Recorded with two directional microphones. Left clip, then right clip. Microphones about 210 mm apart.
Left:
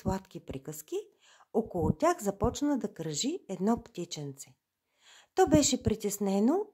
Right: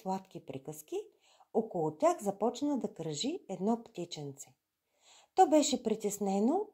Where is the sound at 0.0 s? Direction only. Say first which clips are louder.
Left 2 dB; 10° left (ahead or behind).